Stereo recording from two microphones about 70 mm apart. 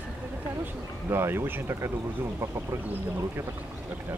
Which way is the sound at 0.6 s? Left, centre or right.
Right.